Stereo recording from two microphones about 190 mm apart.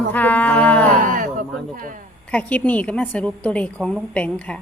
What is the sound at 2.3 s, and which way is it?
A woman's voice, 5° left (ahead or behind).